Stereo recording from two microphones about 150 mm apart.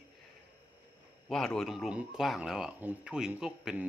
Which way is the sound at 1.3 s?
5° left (ahead or behind).